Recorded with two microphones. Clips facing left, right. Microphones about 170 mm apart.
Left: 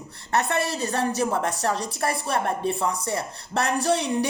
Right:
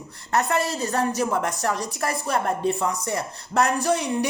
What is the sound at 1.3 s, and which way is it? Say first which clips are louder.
Speech: even; 30° left (ahead or behind).